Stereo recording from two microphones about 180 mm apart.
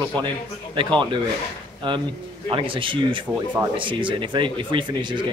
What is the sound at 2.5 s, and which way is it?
Speech, 30° right (ahead or behind).